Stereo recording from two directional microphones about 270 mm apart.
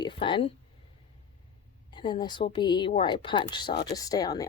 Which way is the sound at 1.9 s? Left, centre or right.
Centre.